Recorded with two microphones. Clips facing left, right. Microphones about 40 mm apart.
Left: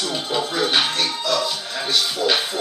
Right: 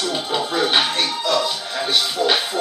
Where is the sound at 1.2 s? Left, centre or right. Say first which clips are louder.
Right 3 dB; right.